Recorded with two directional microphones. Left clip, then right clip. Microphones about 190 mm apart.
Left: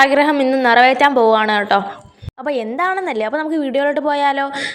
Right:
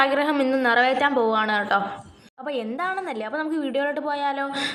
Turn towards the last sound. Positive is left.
turn(degrees=35)  # may be behind; listen again after turning